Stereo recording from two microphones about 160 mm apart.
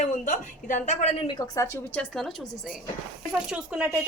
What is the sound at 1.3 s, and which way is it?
Speech, 20° left (ahead or behind).